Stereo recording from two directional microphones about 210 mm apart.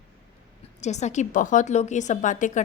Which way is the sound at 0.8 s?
35° left (ahead or behind).